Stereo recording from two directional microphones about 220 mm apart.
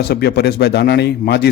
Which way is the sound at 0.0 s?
45° left (ahead or behind).